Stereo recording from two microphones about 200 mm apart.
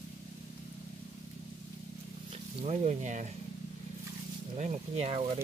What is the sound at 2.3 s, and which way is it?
Speech, 30° right (ahead or behind).